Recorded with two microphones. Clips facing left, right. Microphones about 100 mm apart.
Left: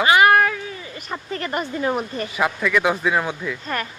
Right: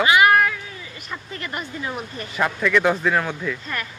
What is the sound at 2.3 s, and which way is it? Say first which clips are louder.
Speech: right 1 dB; 5° left (ahead or behind).